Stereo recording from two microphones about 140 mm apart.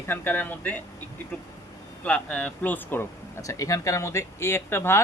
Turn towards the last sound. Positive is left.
turn(degrees=15)  # may be behind; listen again after turning